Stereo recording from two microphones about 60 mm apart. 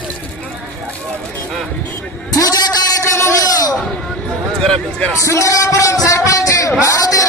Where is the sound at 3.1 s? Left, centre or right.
Left.